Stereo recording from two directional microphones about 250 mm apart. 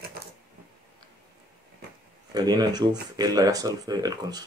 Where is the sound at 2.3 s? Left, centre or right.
Centre.